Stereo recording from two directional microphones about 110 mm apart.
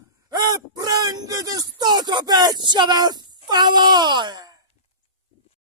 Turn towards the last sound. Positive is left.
turn(degrees=-40)  # may be behind; listen again after turning